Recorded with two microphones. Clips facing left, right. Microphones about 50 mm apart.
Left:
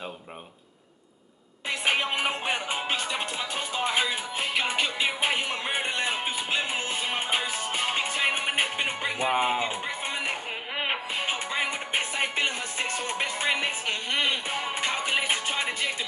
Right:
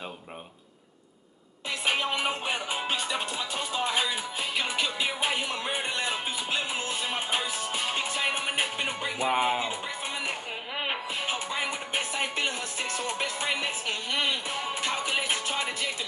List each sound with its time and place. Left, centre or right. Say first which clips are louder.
1.7 s music: left 2 dB; centre
2.9 s music: left 1 dB; centre
4.4 s music: left 3 dB; left
9.3 s music: even; centre
9.7 s music: left 2 dB; left
10.2 s music: left 2 dB; left